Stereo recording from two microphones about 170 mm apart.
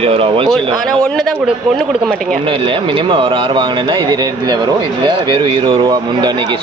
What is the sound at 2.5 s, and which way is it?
A man's voice, 30° right (ahead or behind).